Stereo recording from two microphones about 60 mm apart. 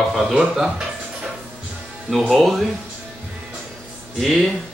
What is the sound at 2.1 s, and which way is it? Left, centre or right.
Speech, centre.